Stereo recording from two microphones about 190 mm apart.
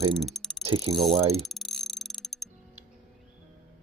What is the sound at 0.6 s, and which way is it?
Speech, 25° right (ahead or behind).